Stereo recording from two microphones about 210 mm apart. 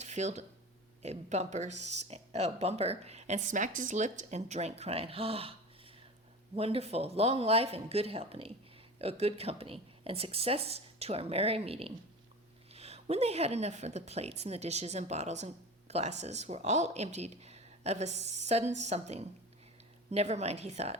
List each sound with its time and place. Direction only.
0.0 s speech: 35° right (ahead or behind)
6.6 s speech: 30° right (ahead or behind)